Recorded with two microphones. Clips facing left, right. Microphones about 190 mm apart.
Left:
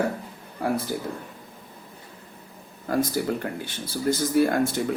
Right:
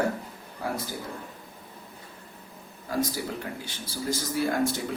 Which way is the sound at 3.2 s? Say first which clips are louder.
Left 8 dB; 60° left (ahead or behind).